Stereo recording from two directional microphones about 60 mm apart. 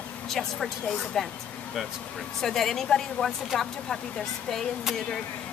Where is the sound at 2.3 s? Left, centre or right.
Centre.